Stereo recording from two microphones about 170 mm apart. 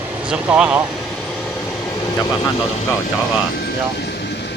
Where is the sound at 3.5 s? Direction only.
70° left (ahead or behind).